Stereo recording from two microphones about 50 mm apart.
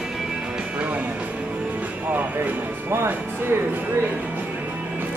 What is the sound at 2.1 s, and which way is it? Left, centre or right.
Music, right.